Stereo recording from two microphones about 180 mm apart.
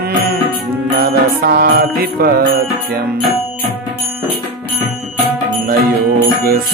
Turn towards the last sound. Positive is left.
turn(degrees=-55)  # may be behind; listen again after turning